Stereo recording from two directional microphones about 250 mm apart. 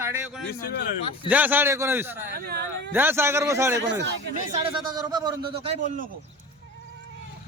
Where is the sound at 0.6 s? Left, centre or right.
Left.